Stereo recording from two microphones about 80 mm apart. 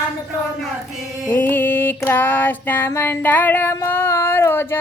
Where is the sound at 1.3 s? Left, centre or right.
Left.